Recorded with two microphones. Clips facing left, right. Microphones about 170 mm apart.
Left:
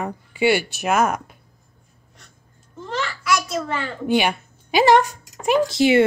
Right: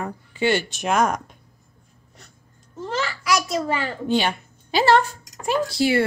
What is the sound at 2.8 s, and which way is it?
Babbling, 5° right (ahead or behind).